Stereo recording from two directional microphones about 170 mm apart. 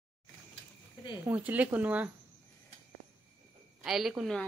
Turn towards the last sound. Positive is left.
turn(degrees=0)  # may be behind; listen again after turning